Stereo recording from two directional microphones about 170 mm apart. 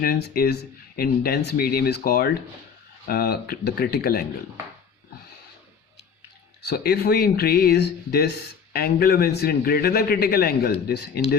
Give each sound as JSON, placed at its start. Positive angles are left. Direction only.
{"t": 0.0, "sound": "a man's voice", "side_deg": 60}
{"t": 6.7, "sound": "a man's voice", "side_deg": 70}